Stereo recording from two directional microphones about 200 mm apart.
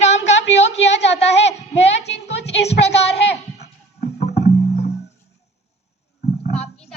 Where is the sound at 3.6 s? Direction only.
35° left (ahead or behind).